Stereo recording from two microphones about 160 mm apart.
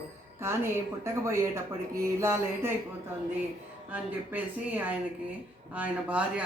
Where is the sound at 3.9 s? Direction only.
10° right (ahead or behind).